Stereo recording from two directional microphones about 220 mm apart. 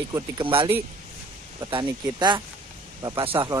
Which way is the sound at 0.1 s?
20° right (ahead or behind).